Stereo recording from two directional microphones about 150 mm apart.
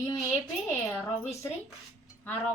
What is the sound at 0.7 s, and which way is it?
Speech, 15° left (ahead or behind).